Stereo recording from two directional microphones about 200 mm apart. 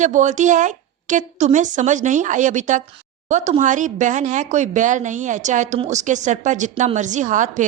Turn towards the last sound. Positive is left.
turn(degrees=-40)  # may be behind; listen again after turning